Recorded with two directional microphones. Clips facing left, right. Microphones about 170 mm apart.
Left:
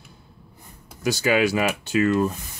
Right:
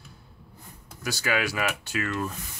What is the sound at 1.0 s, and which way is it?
Speech, 20° left (ahead or behind).